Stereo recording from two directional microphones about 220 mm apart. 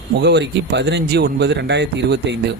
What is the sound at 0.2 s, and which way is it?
Speech, 50° right (ahead or behind).